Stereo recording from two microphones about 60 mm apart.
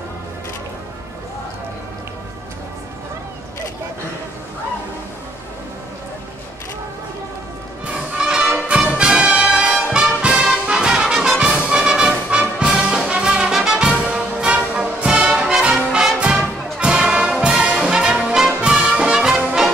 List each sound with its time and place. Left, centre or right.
7.9 s music: centre
10.2 s brass instrument: centre
11.6 s music: centre
15.6 s brass instrument: centre
18.6 s music: centre